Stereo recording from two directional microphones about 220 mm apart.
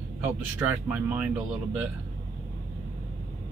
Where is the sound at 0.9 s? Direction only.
10° right (ahead or behind).